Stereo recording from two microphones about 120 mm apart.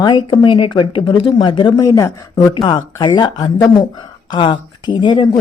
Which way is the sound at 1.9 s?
25° left (ahead or behind).